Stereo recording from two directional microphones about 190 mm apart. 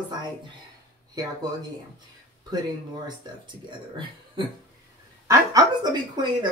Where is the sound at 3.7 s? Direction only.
25° right (ahead or behind).